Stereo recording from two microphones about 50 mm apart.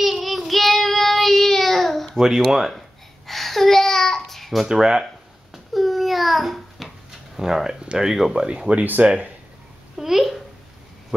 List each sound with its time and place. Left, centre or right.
0.0 s child singing: centre
2.1 s speech: centre
3.3 s a sound: centre
4.6 s speech: centre
5.5 s babbling: centre
8.1 s speech: centre
8.8 s speech: right
9.9 s a child's voice: centre